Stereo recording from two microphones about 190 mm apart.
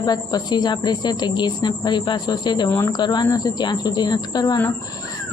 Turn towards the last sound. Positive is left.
turn(degrees=20)  # may be behind; listen again after turning